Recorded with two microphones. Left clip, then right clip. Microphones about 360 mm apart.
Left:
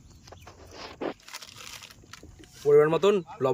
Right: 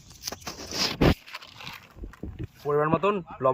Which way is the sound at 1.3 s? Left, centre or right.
Centre.